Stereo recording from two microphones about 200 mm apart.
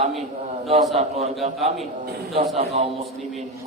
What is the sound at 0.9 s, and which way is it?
Speech, 30° right (ahead or behind).